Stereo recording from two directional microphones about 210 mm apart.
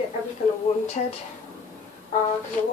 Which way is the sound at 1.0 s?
30° left (ahead or behind).